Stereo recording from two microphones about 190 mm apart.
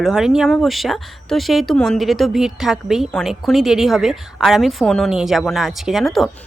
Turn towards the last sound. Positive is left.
turn(degrees=0)  # may be behind; listen again after turning